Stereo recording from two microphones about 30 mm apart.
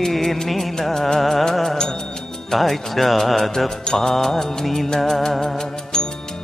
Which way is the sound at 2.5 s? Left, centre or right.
Centre.